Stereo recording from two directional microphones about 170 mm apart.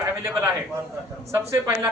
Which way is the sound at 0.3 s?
10° right (ahead or behind).